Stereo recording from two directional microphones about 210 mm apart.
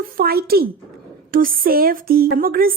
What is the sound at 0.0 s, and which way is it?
A child's voice, 45° right (ahead or behind).